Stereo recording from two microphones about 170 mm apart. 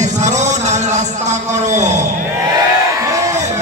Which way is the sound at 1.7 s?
45° right (ahead or behind).